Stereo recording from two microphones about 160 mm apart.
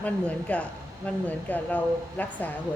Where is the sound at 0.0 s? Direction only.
10° left (ahead or behind).